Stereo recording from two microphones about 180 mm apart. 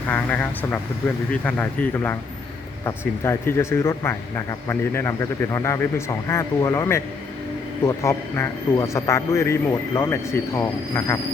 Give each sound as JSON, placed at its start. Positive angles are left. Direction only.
{"t": 0.1, "sound": "a man's voice", "side_deg": 10}